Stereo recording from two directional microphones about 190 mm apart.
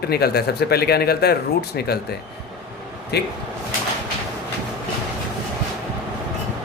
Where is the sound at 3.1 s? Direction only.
60° left (ahead or behind).